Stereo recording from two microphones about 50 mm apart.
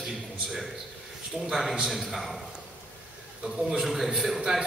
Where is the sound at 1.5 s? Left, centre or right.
Centre.